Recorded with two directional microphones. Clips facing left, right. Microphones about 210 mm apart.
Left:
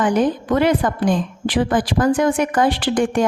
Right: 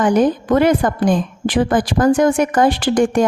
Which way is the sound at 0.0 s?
45° right (ahead or behind).